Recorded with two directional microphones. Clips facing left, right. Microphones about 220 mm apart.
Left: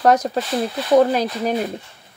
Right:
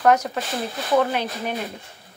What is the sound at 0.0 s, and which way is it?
Speech, 35° left (ahead or behind).